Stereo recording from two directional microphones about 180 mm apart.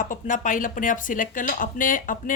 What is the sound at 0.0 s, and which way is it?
Speech, 45° left (ahead or behind).